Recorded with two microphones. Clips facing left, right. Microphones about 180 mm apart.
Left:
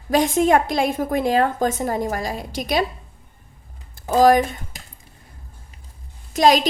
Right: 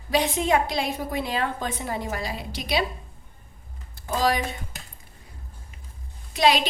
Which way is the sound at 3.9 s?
50° left (ahead or behind).